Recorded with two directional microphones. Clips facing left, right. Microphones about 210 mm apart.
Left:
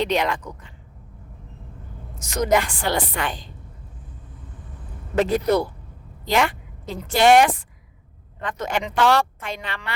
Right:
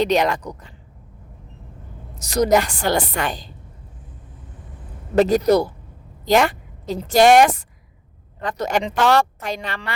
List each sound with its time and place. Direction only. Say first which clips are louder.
0.0 s a woman's voice: right 4 dB; 40° right (ahead or behind)
2.1 s a woman's voice: right 4 dB; 35° right (ahead or behind)
5.1 s a woman's voice: right 4 dB; 40° right (ahead or behind)